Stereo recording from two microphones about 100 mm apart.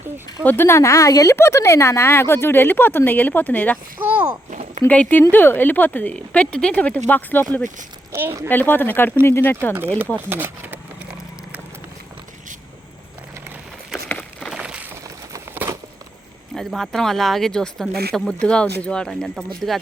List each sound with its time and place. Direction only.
0.4 s speech: 25° left (ahead or behind)
4.0 s speech: 15° right (ahead or behind)
4.9 s speech: 15° left (ahead or behind)
8.1 s speech: 25° right (ahead or behind)
8.4 s speech: 20° left (ahead or behind)
10.2 s speech: 20° right (ahead or behind)
14.1 s a sound: 10° left (ahead or behind)
14.5 s a sound: 10° right (ahead or behind)
15.5 s a sound: 25° right (ahead or behind)
16.6 s speech: centre (ahead or behind)